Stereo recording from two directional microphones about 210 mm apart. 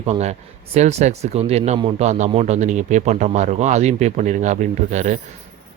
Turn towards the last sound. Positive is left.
turn(degrees=-35)  # may be behind; listen again after turning